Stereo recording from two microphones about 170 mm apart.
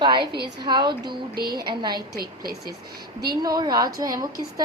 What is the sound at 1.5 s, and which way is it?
Speech, 25° right (ahead or behind).